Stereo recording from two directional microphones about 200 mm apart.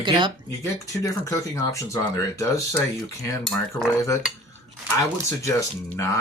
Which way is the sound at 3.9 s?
15° left (ahead or behind).